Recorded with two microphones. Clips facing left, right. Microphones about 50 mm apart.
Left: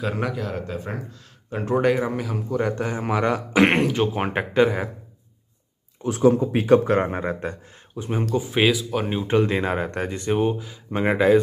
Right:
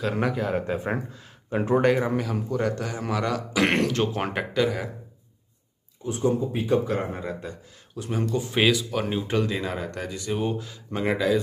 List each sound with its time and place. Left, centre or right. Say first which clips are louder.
0.0 s a man's voice: right 1 dB; centre; by 1.0 s right
1.5 s a man's voice: even; centre
2.6 s a man's voice: left 3 dB; left
3.9 s a man's voice: left 3 dB; centre
6.0 s a man's voice: left 6 dB; left
7.9 s speech: left 2 dB; left
8.4 s speech: left 2 dB; centre
9.3 s speech: left 9 dB; left
10.4 s speech: left 5 dB; centre
11.0 s speech: left 6 dB; left